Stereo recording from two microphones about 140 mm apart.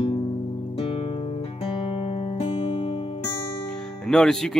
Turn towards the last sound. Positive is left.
turn(degrees=5)  # may be behind; listen again after turning